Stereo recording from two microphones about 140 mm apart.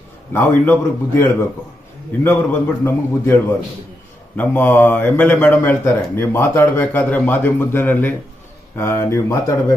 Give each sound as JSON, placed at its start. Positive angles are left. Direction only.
{"t": 0.3, "sound": "speech", "side_deg": 15}
{"t": 4.4, "sound": "speech", "side_deg": 10}